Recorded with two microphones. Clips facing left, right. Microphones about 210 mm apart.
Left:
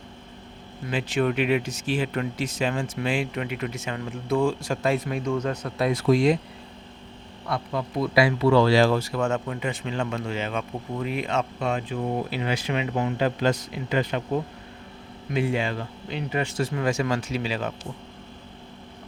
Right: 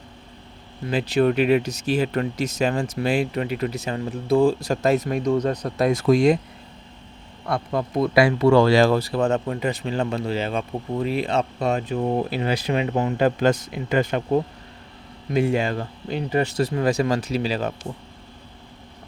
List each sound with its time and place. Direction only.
0.9 s speech: 35° right (ahead or behind)
7.4 s speech: 45° right (ahead or behind)